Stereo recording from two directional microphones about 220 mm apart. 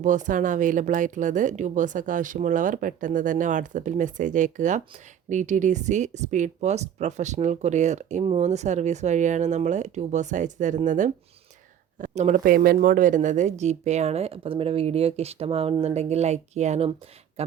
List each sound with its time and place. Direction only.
0.0 s speech: 35° right (ahead or behind)